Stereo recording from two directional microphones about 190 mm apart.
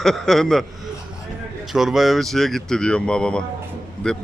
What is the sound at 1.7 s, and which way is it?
A man's voice, centre (ahead or behind).